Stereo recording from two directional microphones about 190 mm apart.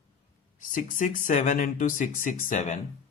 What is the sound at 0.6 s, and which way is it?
Speech, 45° left (ahead or behind).